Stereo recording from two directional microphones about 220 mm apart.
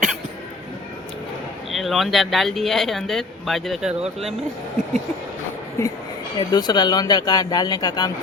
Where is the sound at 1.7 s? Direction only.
Centre (ahead or behind).